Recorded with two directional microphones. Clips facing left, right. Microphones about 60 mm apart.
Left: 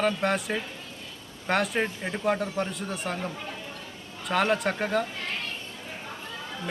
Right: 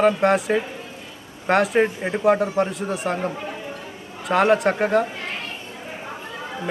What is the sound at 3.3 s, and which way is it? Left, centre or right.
Speech, right.